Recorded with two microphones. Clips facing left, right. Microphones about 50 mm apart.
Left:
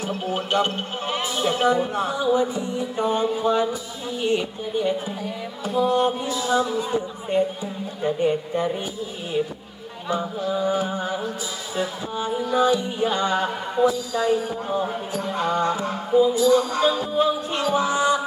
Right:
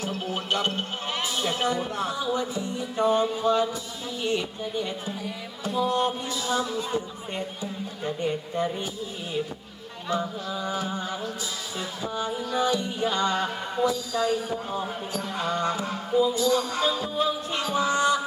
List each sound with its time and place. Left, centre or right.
0.0 s speech: centre
10.1 s speech: centre